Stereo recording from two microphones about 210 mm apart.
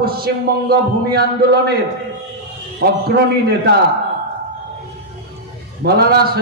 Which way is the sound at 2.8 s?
50° right (ahead or behind).